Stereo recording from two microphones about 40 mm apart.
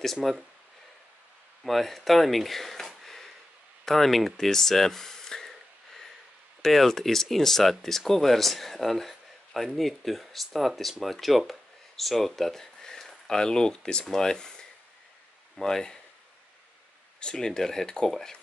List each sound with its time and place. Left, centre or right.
0.0 s speech: centre
1.6 s speech: centre
6.6 s speech: centre
17.2 s speech: left